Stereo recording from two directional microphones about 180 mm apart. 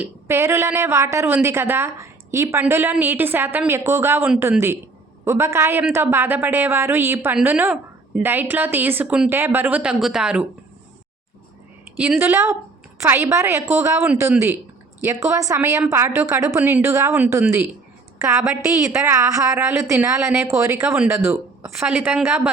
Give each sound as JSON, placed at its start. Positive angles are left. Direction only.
{"t": 0.0, "sound": "a woman's voice", "side_deg": -15}
{"t": 11.9, "sound": "a woman's voice", "side_deg": -5}
{"t": 18.2, "sound": "a woman's voice", "side_deg": -15}